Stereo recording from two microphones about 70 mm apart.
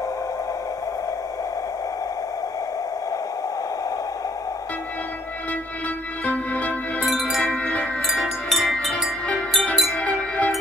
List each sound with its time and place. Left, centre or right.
6.2 s music: centre
7.1 s chime: centre
7.4 s music: centre
8.2 s music: centre
10.0 s music: centre